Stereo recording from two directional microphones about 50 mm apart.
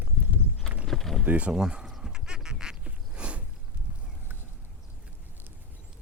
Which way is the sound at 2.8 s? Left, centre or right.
Right.